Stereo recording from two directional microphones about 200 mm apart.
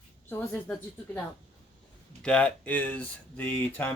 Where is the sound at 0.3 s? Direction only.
10° left (ahead or behind).